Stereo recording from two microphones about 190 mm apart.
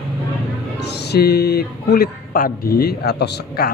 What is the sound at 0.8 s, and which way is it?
Speech, 60° left (ahead or behind).